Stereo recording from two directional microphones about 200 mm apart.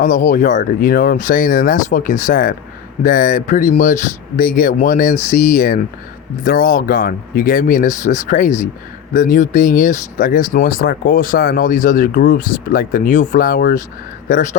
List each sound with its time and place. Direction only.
0.0 s speech: 40° left (ahead or behind)